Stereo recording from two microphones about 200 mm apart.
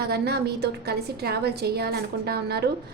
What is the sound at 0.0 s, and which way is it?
A woman's voice, 50° right (ahead or behind).